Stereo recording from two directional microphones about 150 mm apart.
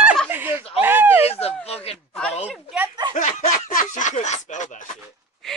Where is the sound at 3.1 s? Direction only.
55° left (ahead or behind).